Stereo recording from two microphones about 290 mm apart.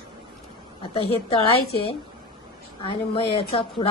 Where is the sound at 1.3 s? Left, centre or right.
Centre.